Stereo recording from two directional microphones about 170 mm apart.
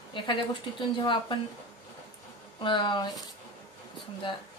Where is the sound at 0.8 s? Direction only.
30° left (ahead or behind).